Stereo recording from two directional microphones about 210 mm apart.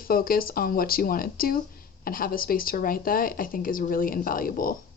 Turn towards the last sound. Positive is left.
turn(degrees=40)  # may be behind; listen again after turning